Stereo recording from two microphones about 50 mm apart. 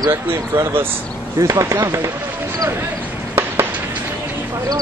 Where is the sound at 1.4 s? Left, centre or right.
Right.